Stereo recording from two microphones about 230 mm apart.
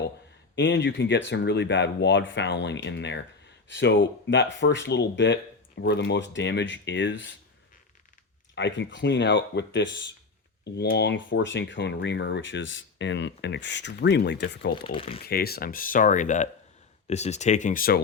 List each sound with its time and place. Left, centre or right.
0.5 s speech: left
8.5 s speech: left
14.7 s speech: left
15.2 s speech: left